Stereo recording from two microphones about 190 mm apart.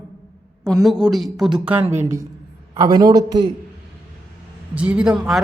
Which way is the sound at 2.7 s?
20° right (ahead or behind).